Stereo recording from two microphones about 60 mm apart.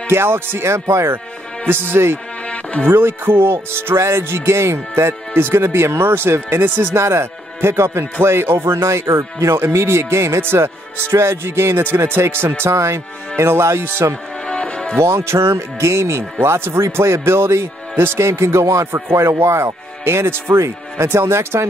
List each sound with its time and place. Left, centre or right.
0.1 s speech: right
1.7 s speech: right
2.5 s music: left
2.9 s speech: right
7.0 s speech: right
14.5 s music: centre
15.0 s speech: right
19.1 s speech: right